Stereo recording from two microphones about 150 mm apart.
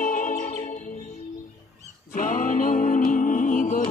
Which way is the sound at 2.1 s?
65° left (ahead or behind).